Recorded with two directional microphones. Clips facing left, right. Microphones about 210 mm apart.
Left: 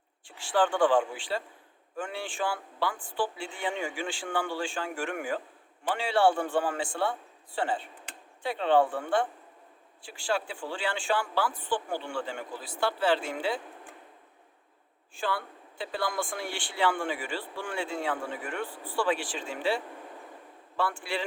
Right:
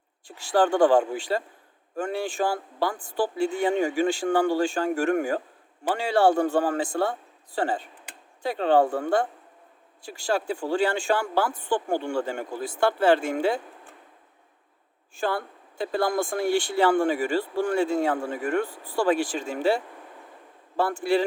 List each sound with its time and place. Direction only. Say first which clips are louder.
0.3 s speech: right 5 dB; 40° right (ahead or behind)
15.1 s speech: right 5 dB; 45° right (ahead or behind)